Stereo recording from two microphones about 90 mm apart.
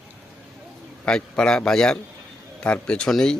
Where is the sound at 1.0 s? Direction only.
10° left (ahead or behind).